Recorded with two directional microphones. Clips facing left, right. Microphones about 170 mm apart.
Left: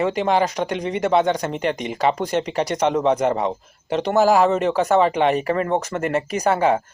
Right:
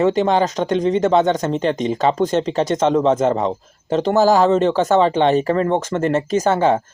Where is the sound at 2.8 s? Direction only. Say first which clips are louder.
Right 3 dB; 15° left (ahead or behind).